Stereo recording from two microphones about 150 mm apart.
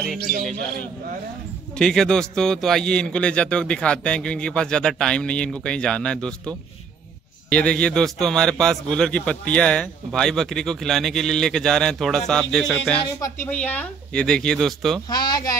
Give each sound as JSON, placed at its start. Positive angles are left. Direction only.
{"t": 1.8, "sound": "a man's voice", "side_deg": 5}
{"t": 15.0, "sound": "speech", "side_deg": 25}